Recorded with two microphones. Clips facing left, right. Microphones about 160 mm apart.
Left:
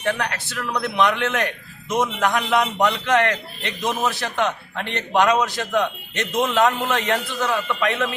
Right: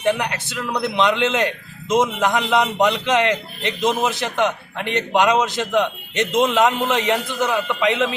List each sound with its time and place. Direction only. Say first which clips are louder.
0.0 s speech: right 4 dB; 15° right (ahead or behind)